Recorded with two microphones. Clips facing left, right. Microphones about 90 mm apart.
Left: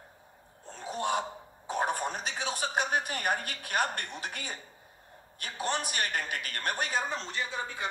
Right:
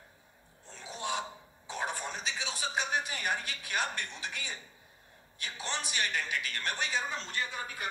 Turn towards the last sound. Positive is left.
turn(degrees=20)  # may be behind; listen again after turning